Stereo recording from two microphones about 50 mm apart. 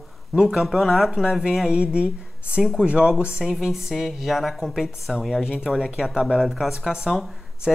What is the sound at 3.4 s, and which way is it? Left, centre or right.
Speech, centre.